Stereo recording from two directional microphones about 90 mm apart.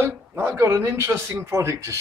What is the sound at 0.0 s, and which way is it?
Speech, 30° right (ahead or behind).